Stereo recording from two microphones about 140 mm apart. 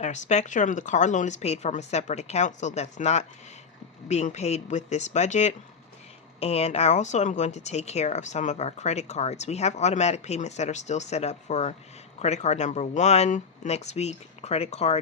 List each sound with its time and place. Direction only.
0.0 s a woman's voice: 60° left (ahead or behind)